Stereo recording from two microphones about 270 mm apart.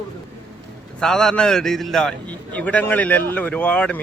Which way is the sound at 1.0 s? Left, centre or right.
Centre.